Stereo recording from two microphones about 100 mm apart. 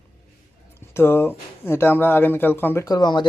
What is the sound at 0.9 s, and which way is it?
Speech, 25° left (ahead or behind).